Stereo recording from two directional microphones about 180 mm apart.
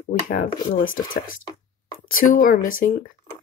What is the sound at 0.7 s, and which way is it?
Speech, 90° left.